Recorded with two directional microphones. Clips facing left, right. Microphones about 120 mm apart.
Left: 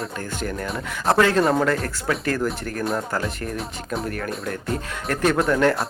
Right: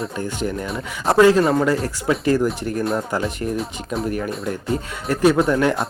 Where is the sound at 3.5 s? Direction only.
Centre (ahead or behind).